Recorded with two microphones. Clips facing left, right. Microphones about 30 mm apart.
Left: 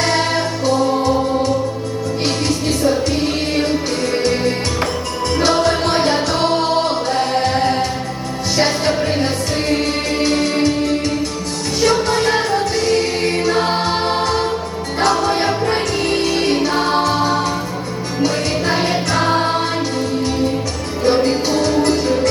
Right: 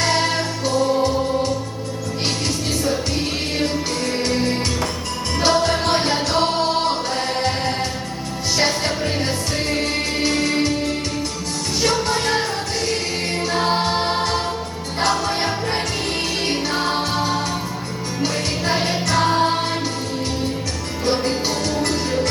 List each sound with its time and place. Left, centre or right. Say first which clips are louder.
4.3 s music: left 2 dB; centre
5.8 s music: left 3 dB; centre
7.5 s music: left 6 dB; centre
8.9 s music: left 5 dB; left
9.7 s music: left 4 dB; centre
11.9 s music: left 5 dB; centre
13.7 s music: left 2 dB; centre
18.6 s music: left 1 dB; left
21.0 s music: left 6 dB; left